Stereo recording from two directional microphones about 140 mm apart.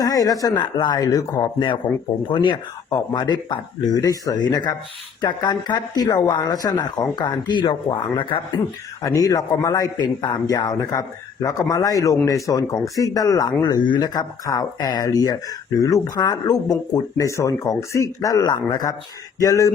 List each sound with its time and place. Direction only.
0.0 s speech: 25° left (ahead or behind)
2.3 s speech: 35° left (ahead or behind)
8.5 s speech: 25° left (ahead or behind)